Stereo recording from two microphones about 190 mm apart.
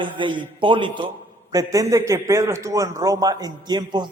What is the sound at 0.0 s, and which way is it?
A man's voice, 25° right (ahead or behind).